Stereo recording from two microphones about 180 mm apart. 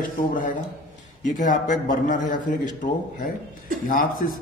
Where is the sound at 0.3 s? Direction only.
45° left (ahead or behind).